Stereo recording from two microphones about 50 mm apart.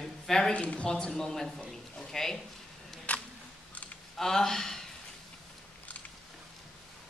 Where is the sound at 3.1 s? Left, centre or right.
Left.